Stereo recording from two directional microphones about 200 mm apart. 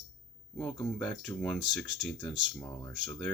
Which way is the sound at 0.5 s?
5° left (ahead or behind).